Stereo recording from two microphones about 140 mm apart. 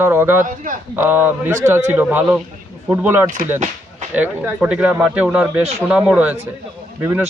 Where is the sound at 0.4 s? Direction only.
70° right (ahead or behind).